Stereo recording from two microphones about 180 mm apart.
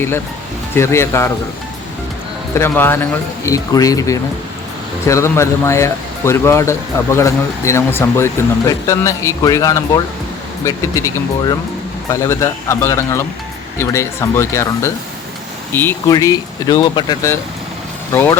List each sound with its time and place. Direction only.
0.8 s speech: 15° left (ahead or behind)
2.6 s speech: 15° left (ahead or behind)
18.1 s speech: 15° left (ahead or behind)